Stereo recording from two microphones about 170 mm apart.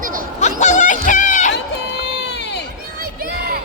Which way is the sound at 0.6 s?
45° left (ahead or behind).